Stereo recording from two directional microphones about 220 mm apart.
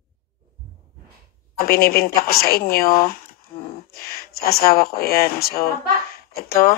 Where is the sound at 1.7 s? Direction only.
45° left (ahead or behind).